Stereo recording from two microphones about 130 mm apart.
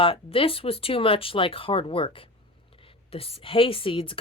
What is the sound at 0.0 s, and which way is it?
Speech, 45° left (ahead or behind).